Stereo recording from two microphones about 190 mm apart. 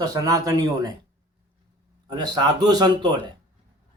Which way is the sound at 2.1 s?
20° right (ahead or behind).